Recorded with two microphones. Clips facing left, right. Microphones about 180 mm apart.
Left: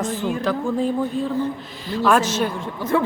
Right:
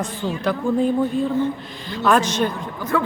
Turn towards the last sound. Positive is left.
turn(degrees=25)  # may be behind; listen again after turning